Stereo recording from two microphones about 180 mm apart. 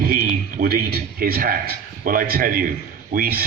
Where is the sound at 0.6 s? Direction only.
55° right (ahead or behind).